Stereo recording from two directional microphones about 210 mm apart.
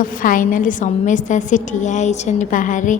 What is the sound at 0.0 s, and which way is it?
A woman's voice, 40° left (ahead or behind).